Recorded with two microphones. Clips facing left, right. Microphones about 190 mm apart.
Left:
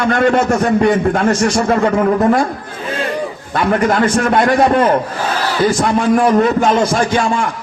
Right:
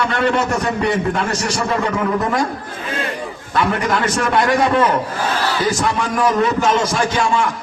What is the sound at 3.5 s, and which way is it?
A man's voice, 40° left (ahead or behind).